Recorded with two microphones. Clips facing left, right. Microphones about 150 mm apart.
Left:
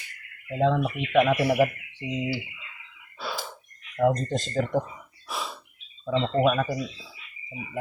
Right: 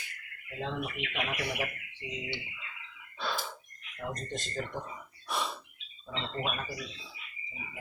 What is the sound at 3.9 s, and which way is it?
Speech, 90° left.